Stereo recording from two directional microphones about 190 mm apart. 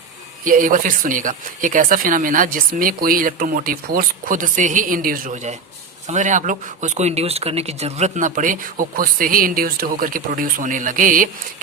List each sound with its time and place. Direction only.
0.4 s speech: 45° right (ahead or behind)